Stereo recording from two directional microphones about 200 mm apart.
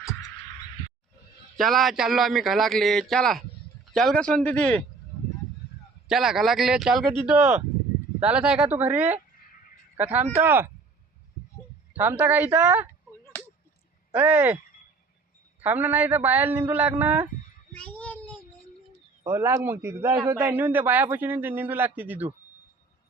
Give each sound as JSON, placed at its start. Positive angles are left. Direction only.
{"t": 0.0, "sound": "a sound", "side_deg": 15}
{"t": 1.5, "sound": "a man's voice", "side_deg": 0}
{"t": 6.1, "sound": "a man's voice", "side_deg": 0}
{"t": 11.9, "sound": "a man's voice", "side_deg": -10}
{"t": 13.3, "sound": "a sound", "side_deg": 10}
{"t": 14.1, "sound": "a man's voice", "side_deg": -10}
{"t": 15.6, "sound": "a man's voice", "side_deg": -10}
{"t": 17.7, "sound": "child singing", "side_deg": 5}
{"t": 19.2, "sound": "a man's voice", "side_deg": -10}